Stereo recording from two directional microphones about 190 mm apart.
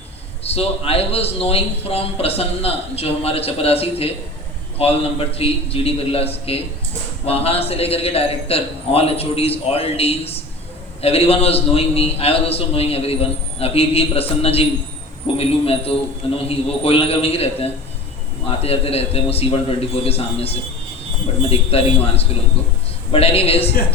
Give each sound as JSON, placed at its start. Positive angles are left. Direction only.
{"t": 0.4, "sound": "a man's voice", "side_deg": 30}